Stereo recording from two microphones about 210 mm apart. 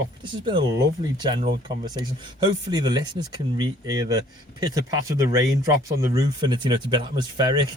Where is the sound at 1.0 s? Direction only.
20° right (ahead or behind).